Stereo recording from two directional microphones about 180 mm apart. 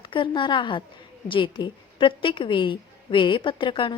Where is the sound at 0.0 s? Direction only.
25° left (ahead or behind).